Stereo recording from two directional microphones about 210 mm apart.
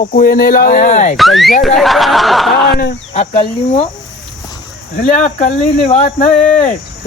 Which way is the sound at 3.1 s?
30° left (ahead or behind).